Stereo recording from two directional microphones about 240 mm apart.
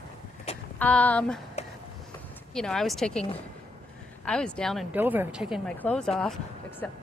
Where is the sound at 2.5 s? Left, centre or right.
Centre.